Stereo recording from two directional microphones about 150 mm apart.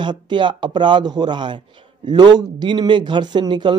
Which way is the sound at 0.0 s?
30° right (ahead or behind).